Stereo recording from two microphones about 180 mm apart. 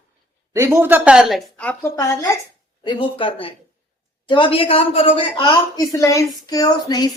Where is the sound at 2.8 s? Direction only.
25° left (ahead or behind).